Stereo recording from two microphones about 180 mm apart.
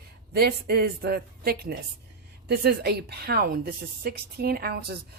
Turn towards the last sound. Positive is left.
turn(degrees=-60)  # may be behind; listen again after turning